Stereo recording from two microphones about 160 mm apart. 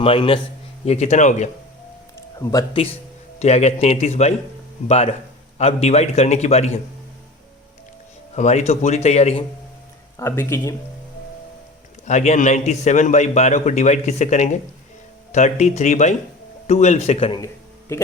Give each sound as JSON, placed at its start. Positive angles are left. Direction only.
{"t": 0.0, "sound": "a man's voice", "side_deg": 35}
{"t": 2.4, "sound": "speech", "side_deg": 20}
{"t": 3.3, "sound": "a man's voice", "side_deg": 45}
{"t": 8.4, "sound": "a man's voice", "side_deg": 45}
{"t": 10.2, "sound": "speech", "side_deg": 15}
{"t": 12.0, "sound": "a man's voice", "side_deg": 45}
{"t": 17.4, "sound": "a sound", "side_deg": 15}